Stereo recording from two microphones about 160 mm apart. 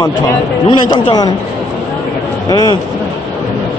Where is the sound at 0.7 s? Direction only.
30° left (ahead or behind).